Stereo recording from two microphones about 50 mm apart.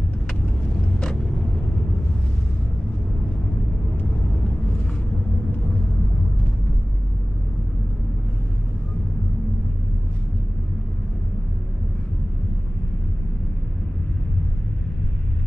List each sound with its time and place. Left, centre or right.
0.9 s vehicle: centre